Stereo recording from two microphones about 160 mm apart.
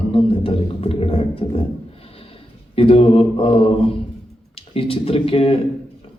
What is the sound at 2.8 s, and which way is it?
A man's voice, 35° left (ahead or behind).